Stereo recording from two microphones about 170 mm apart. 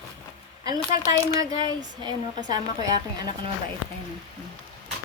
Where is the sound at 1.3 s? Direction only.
20° right (ahead or behind).